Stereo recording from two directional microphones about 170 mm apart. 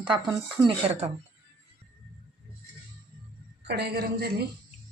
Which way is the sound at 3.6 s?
70° right (ahead or behind).